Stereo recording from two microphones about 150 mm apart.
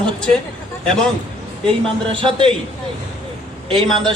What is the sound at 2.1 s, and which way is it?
Speech, 35° right (ahead or behind).